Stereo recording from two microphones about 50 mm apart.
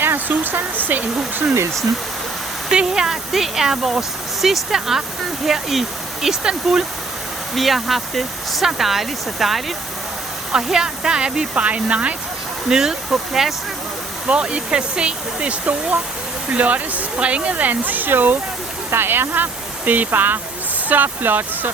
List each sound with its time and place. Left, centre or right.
0.0 s a sound: right
2.6 s speech: centre
6.2 s speech: centre
7.5 s speech: centre; by 12.1 s right
12.6 s speech: centre
14.3 s speech: right